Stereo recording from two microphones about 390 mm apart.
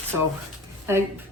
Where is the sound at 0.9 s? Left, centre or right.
Centre.